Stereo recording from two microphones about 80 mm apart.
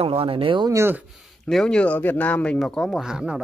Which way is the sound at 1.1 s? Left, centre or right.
Centre.